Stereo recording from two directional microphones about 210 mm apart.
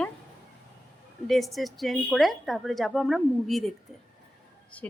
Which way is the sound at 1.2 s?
Centre (ahead or behind).